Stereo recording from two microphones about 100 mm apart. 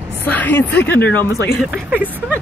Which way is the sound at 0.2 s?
15° left (ahead or behind).